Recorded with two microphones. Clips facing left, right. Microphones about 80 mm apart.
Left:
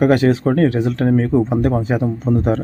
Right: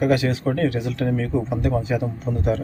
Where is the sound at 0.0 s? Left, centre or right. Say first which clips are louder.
Left 6 dB; left.